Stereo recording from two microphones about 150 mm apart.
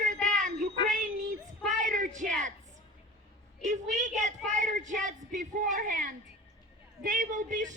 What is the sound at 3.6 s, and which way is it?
Speech, 55° right (ahead or behind).